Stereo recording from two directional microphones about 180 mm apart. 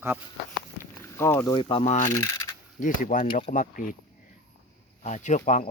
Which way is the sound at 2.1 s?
20° left (ahead or behind).